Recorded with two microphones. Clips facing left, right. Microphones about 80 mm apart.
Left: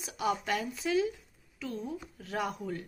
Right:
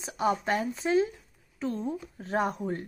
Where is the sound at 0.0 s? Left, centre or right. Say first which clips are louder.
Right 4 dB; right.